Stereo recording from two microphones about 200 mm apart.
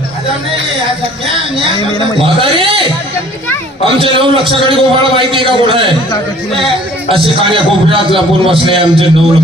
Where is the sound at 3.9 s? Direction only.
25° right (ahead or behind).